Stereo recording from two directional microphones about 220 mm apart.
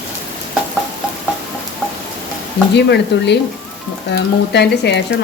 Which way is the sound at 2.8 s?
50° left (ahead or behind).